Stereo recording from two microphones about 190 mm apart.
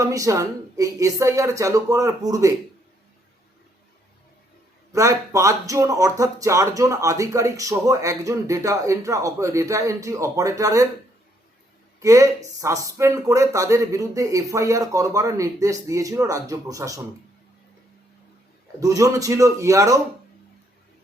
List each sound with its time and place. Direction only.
0.0 s speech: 15° right (ahead or behind)
4.9 s speech: 15° right (ahead or behind)
11.9 s speech: 15° right (ahead or behind)
18.8 s speech: 15° right (ahead or behind)